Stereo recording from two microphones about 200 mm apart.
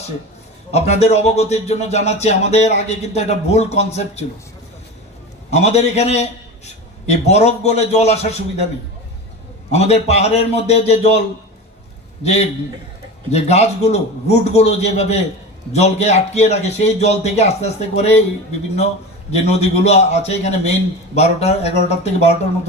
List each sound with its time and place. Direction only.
0.7 s speech: 30° left (ahead or behind)
5.5 s speech: 35° left (ahead or behind)
9.7 s speech: 30° left (ahead or behind)
12.2 s speech: 30° left (ahead or behind)
19.5 s speech: 30° left (ahead or behind)